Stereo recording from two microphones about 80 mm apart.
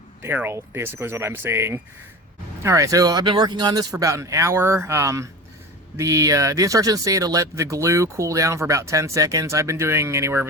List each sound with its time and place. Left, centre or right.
0.2 s speech: right
2.6 s speech: right
3.2 s speech: right
3.9 s speech: right